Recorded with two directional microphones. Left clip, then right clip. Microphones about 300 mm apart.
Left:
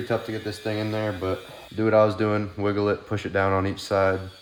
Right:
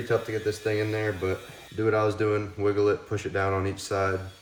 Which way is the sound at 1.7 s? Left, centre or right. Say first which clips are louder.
Left 5 dB; centre.